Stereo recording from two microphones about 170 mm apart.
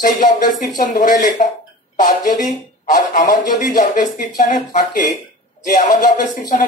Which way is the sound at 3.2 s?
25° left (ahead or behind).